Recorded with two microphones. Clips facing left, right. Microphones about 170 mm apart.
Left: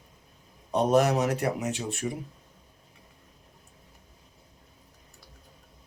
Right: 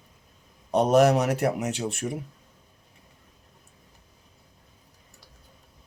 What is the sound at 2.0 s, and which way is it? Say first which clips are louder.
Speech: left 1 dB; 50° right (ahead or behind).